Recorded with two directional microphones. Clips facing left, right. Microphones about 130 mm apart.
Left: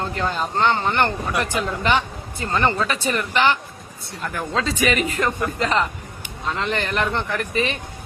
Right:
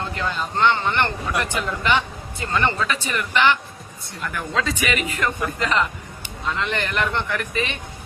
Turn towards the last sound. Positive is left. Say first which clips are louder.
# left 2 dB
turn(degrees=35)  # may be behind; listen again after turning